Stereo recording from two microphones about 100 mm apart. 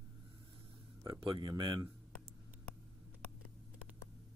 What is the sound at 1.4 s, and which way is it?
Speech, 45° right (ahead or behind).